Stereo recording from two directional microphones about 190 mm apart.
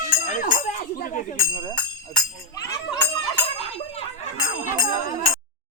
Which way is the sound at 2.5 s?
15° left (ahead or behind).